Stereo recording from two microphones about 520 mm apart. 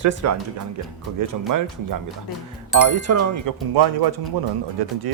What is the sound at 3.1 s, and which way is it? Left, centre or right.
Speech, right.